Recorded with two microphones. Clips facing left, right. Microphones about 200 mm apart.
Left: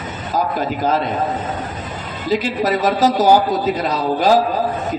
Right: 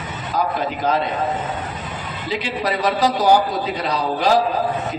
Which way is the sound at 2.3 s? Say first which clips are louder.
Left 5 dB; 45° left (ahead or behind).